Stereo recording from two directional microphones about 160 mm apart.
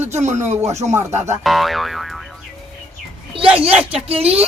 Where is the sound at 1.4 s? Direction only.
Centre (ahead or behind).